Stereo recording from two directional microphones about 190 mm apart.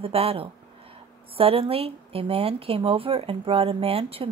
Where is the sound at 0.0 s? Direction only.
30° right (ahead or behind).